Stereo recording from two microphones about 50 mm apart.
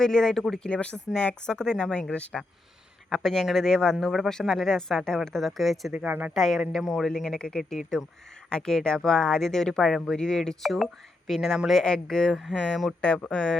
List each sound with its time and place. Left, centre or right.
0.0 s speech: centre
0.7 s speech: left
3.1 s speech: centre
6.1 s speech: right
6.3 s speech: centre
7.2 s speech: centre
10.6 s speech: centre